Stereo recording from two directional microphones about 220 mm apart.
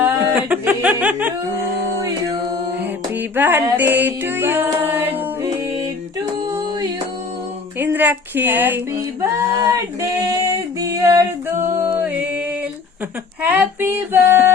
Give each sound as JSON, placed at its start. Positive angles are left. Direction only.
{"t": 0.0, "sound": "chuckle", "side_deg": -10}
{"t": 3.2, "sound": "music", "side_deg": -10}
{"t": 7.8, "sound": "a woman's voice", "side_deg": -10}
{"t": 9.2, "sound": "a sound", "side_deg": -15}
{"t": 10.8, "sound": "female singing", "side_deg": -15}
{"t": 11.7, "sound": "music", "side_deg": -10}
{"t": 13.4, "sound": "a sound", "side_deg": -5}